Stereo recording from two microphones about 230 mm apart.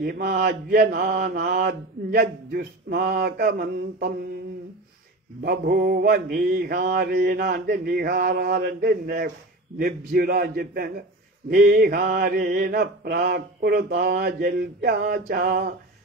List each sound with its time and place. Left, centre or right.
0.0 s mantra: right
5.4 s mantra: right